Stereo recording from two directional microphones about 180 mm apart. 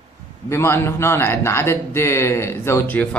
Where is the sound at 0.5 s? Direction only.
15° left (ahead or behind).